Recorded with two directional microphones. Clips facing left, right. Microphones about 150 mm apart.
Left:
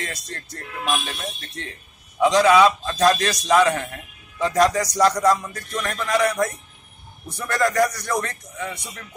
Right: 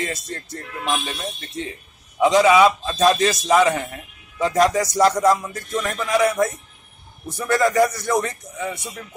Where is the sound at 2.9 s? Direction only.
15° right (ahead or behind).